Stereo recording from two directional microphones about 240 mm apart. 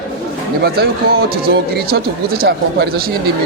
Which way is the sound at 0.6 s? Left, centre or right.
Right.